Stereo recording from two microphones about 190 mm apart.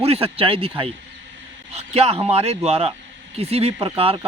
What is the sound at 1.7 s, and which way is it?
A man's voice, 35° right (ahead or behind).